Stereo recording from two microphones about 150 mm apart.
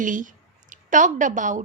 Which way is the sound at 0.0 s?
60° right (ahead or behind).